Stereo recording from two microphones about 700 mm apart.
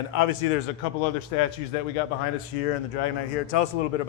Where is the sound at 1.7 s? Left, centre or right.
Left.